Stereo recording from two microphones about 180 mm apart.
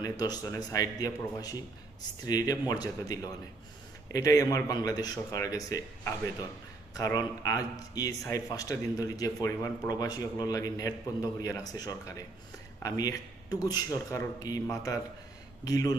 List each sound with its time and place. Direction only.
0.0 s speech: 20° left (ahead or behind)